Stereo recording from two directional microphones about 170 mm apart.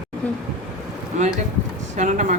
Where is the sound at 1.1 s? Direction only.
45° right (ahead or behind).